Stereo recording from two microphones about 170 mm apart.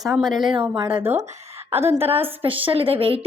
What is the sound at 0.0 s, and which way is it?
Speech, centre (ahead or behind).